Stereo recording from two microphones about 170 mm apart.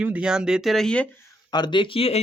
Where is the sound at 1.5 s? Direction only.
25° left (ahead or behind).